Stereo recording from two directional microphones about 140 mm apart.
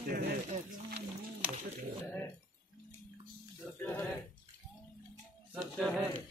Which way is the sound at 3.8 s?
10° left (ahead or behind).